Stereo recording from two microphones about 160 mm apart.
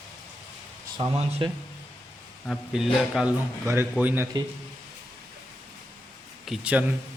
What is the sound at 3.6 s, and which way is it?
Speech, 15° right (ahead or behind).